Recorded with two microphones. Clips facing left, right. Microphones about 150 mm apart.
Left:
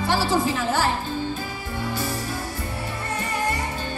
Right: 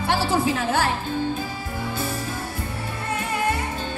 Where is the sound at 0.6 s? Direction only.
55° right (ahead or behind).